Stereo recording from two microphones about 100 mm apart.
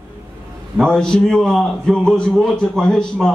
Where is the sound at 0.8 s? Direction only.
5° left (ahead or behind).